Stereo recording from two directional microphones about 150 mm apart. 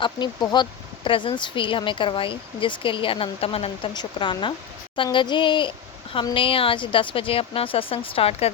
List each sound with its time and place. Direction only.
0.0 s speech: 30° left (ahead or behind)